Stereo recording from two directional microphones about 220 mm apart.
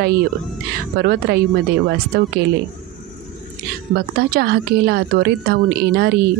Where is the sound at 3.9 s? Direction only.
45° right (ahead or behind).